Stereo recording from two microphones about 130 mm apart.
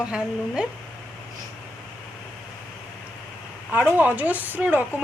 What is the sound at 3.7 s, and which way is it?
A woman's voice, 10° right (ahead or behind).